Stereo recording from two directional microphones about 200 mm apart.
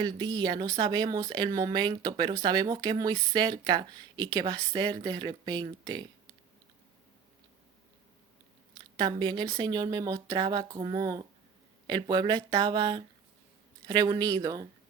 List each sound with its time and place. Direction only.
0.0 s speech: 20° right (ahead or behind)
9.0 s speech: 20° right (ahead or behind)